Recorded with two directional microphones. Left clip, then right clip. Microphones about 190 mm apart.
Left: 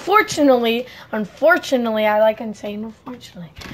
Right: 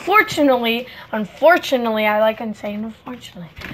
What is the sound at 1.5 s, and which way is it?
Speech, 25° left (ahead or behind).